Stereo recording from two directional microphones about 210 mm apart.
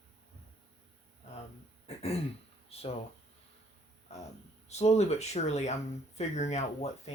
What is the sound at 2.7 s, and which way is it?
Speech, 30° left (ahead or behind).